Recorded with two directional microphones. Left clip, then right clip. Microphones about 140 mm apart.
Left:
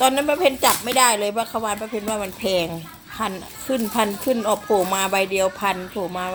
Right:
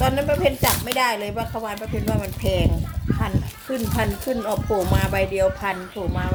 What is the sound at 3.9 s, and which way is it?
Speech, 25° left (ahead or behind).